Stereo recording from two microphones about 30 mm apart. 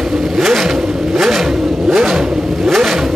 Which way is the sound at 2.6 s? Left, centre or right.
Centre.